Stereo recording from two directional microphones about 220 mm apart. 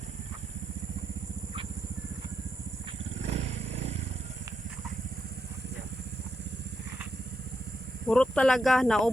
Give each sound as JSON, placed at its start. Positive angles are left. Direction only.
{"t": 3.2, "sound": "vehicle", "side_deg": -30}
{"t": 8.0, "sound": "speech", "side_deg": 5}